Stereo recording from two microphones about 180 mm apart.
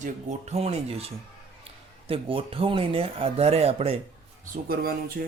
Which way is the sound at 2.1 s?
30° right (ahead or behind).